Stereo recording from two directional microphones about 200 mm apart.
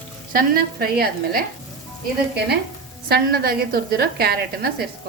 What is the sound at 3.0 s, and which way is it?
A woman's voice, 50° right (ahead or behind).